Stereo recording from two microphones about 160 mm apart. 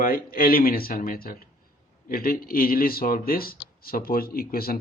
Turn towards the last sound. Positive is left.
turn(degrees=70)  # may be behind; listen again after turning